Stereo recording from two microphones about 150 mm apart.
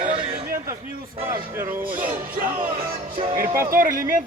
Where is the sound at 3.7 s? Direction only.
70° right (ahead or behind).